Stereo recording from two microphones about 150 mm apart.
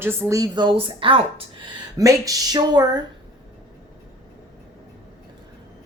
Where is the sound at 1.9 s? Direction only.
25° right (ahead or behind).